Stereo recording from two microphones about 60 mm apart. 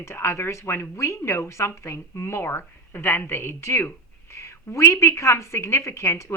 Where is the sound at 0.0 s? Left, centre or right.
Left.